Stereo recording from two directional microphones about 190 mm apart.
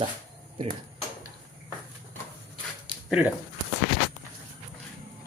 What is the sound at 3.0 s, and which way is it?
Speech, 5° right (ahead or behind).